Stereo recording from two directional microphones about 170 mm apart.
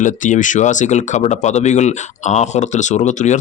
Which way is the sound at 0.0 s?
45° left (ahead or behind).